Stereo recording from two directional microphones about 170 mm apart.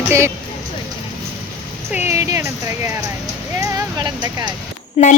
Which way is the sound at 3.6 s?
20° right (ahead or behind).